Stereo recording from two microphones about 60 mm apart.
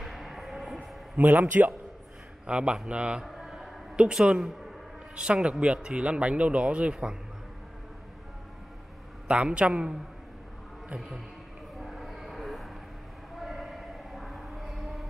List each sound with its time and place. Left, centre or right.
0.0 s a sound: centre
1.1 s speech: right
2.4 s a woman's voice: centre
3.3 s a sound: centre
3.9 s a woman's voice: centre
9.3 s speech: centre
11.0 s a man's voice: centre
11.8 s train: centre
13.4 s a sound: centre